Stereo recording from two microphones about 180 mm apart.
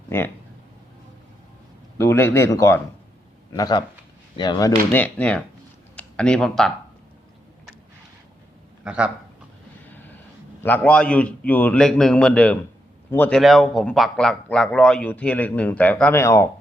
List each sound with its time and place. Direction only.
0.1 s a man's voice: 15° left (ahead or behind)
2.0 s a man's voice: 15° left (ahead or behind)
4.9 s a man's voice: 10° left (ahead or behind)
8.8 s speech: 5° right (ahead or behind)
10.6 s a man's voice: 10° left (ahead or behind)